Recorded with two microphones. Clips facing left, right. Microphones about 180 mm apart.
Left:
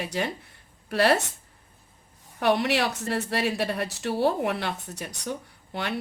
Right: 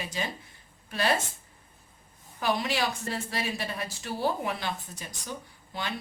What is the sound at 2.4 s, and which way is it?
Speech, 70° left (ahead or behind).